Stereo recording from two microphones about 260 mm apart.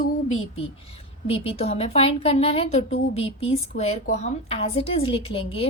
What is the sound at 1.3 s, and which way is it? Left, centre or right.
A woman's voice, left.